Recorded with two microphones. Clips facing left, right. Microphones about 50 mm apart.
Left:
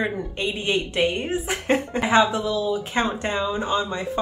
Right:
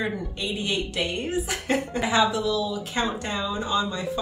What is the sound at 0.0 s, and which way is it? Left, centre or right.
A woman's voice, left.